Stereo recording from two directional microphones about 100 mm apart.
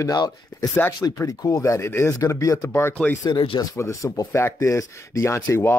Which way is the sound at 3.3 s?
50° left (ahead or behind).